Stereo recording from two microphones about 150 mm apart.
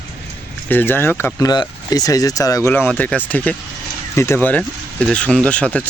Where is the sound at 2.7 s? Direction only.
10° left (ahead or behind).